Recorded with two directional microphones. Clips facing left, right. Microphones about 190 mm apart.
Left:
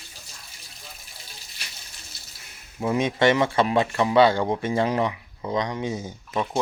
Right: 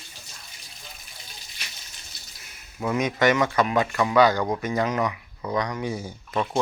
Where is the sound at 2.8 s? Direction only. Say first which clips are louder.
Left 1 dB; 30° left (ahead or behind).